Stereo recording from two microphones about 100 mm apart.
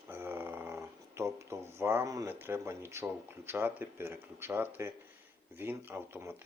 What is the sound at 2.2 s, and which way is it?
Speech, 20° right (ahead or behind).